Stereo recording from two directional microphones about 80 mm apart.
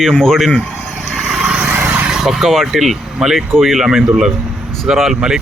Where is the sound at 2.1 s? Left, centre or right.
Centre.